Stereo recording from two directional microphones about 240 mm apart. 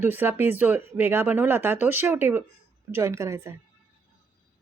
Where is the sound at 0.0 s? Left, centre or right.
Centre.